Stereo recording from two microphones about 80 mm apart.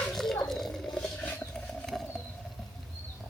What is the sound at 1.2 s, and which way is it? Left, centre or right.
Patter, left.